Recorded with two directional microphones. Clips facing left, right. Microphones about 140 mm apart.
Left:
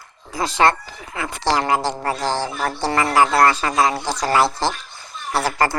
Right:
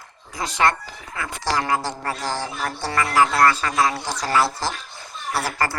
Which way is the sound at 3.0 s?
60° left (ahead or behind).